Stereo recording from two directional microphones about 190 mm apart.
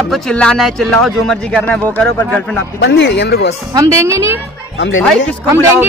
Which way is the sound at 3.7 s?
15° right (ahead or behind).